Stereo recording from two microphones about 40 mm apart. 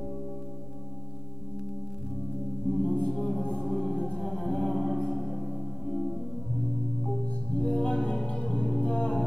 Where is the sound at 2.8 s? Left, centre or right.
Left.